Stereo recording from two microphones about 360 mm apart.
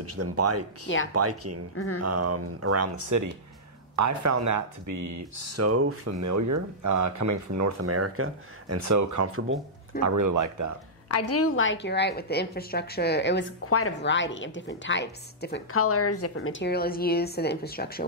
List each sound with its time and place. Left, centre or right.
0.0 s speech: right
11.1 s a woman's voice: left